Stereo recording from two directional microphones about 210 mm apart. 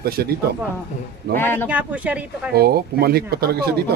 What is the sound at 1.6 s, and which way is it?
Speech, 5° right (ahead or behind).